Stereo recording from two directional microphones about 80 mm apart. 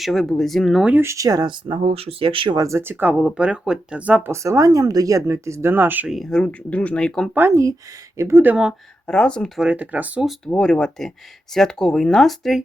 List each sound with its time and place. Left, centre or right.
0.0 s speech: centre
1.0 s speech: right
1.5 s speech: right
2.6 s speech: right
2.8 s speech: right
4.3 s speech: right
6.3 s speech: centre
7.3 s speech: right
8.4 s speech: centre
9.0 s speech: centre
9.6 s speech: centre
10.5 s speech: centre